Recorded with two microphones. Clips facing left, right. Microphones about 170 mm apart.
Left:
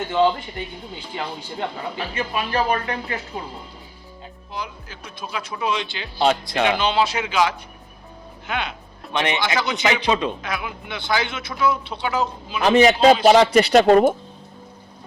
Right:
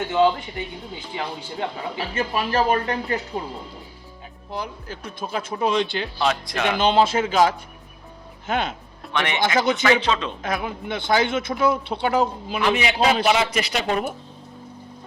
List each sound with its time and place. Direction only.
0.1 s speech: 5° right (ahead or behind)
2.1 s speech: 40° right (ahead or behind)
4.5 s speech: 55° right (ahead or behind)
6.1 s speech: 30° left (ahead or behind)
6.7 s speech: 50° right (ahead or behind)
9.1 s speech: 20° left (ahead or behind)
9.6 s speech: 50° right (ahead or behind)
10.0 s a man's voice: 15° left (ahead or behind)
10.4 s speech: 40° right (ahead or behind)
12.5 s speech: 40° left (ahead or behind)